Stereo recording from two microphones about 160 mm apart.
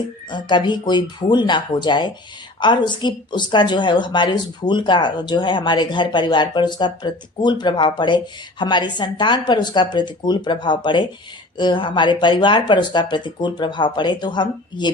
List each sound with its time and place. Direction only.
0.3 s a woman's voice: 30° left (ahead or behind)